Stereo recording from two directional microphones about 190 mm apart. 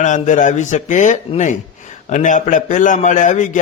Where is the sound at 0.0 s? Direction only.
40° left (ahead or behind).